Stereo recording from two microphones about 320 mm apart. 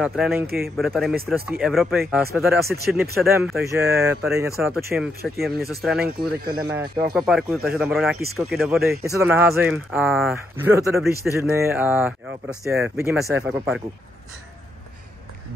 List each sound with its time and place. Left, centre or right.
0.0 s speech: centre
6.0 s speech: right
6.6 s speech: centre
7.2 s speech: centre